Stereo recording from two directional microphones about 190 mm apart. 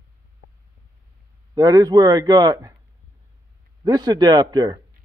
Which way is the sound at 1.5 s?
20° right (ahead or behind).